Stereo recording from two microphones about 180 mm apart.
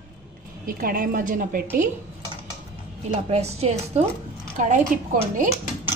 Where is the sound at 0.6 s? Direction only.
50° right (ahead or behind).